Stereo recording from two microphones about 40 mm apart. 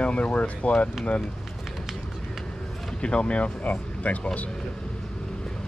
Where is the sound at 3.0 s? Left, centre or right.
Left.